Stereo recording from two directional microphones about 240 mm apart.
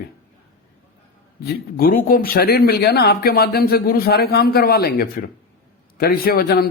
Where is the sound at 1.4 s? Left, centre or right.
Left.